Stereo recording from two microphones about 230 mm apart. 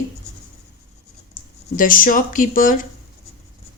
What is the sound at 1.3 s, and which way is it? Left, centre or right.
Speech, left.